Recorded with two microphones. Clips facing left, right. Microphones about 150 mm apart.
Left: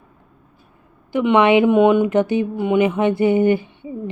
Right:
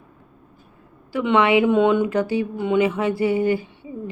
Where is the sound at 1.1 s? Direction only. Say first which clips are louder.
Left 3 dB; 20° left (ahead or behind).